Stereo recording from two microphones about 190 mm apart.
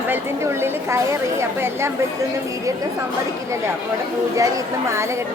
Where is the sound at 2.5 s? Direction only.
15° right (ahead or behind).